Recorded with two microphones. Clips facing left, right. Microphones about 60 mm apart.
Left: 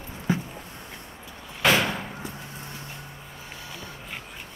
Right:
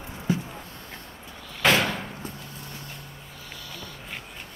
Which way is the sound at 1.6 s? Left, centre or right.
Centre.